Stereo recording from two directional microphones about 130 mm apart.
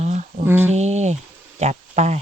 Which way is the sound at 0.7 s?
60° right (ahead or behind).